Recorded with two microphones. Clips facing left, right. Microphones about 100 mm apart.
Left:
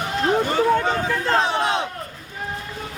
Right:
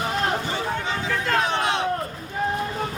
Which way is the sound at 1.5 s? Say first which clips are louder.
Left 2 dB; 20° left (ahead or behind).